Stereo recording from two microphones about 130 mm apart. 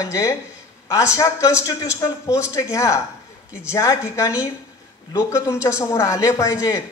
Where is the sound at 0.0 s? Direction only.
25° left (ahead or behind).